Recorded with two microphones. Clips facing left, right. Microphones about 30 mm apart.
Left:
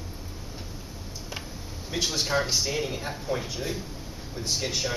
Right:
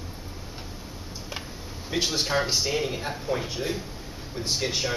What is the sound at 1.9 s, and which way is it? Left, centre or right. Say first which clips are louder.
A man's voice: right 1 dB; centre.